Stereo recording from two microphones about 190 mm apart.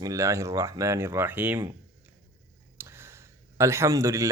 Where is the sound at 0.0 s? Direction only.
15° right (ahead or behind).